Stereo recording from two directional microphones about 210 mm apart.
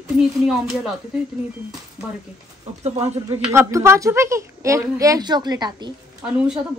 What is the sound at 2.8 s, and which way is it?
Speech, 30° right (ahead or behind).